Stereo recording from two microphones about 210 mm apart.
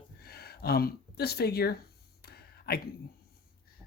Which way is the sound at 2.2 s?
50° left (ahead or behind).